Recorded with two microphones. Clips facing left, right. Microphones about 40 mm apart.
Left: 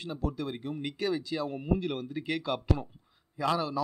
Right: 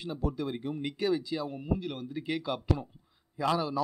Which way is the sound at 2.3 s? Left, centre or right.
Centre.